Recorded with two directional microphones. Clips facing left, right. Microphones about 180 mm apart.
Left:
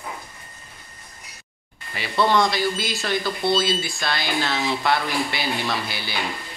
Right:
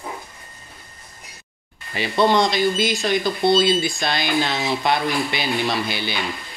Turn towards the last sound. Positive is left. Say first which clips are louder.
# right 4 dB
turn(degrees=-20)  # may be behind; listen again after turning